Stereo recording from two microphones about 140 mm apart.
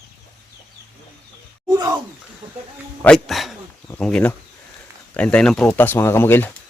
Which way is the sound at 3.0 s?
5° left (ahead or behind).